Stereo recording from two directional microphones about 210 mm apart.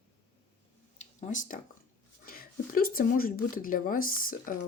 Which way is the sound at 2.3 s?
45° left (ahead or behind).